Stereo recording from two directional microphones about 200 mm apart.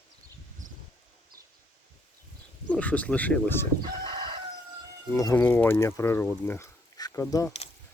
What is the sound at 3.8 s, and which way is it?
Chicken, 25° right (ahead or behind).